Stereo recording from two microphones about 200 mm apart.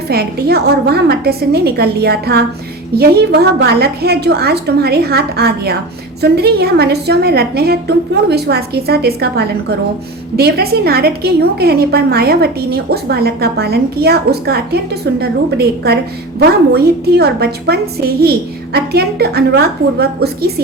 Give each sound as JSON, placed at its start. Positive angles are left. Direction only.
{"t": 0.1, "sound": "a woman's voice", "side_deg": -50}